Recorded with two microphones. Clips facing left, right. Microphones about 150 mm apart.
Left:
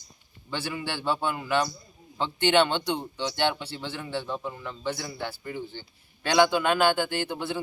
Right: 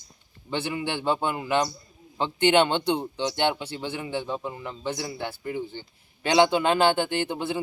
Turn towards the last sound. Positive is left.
turn(degrees=-15)  # may be behind; listen again after turning